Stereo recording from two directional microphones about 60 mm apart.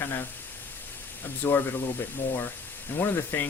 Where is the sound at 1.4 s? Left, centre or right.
Left.